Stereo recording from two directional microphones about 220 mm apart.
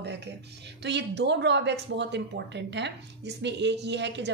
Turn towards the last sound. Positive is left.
turn(degrees=-50)  # may be behind; listen again after turning